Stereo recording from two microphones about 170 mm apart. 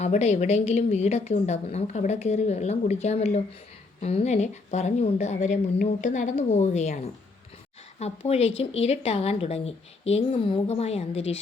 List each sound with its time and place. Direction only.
0.0 s a woman's voice: 40° left (ahead or behind)